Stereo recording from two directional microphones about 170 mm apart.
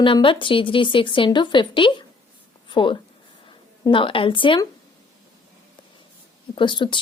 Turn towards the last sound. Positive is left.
turn(degrees=25)  # may be behind; listen again after turning